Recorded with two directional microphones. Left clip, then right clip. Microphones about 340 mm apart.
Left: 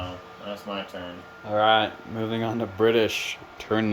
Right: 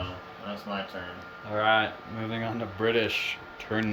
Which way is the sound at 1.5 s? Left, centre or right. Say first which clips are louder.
Left 4 dB; centre.